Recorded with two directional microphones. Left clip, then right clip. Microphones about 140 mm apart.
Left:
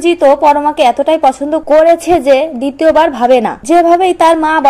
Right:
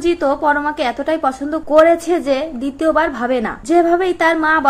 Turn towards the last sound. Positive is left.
turn(degrees=35)  # may be behind; listen again after turning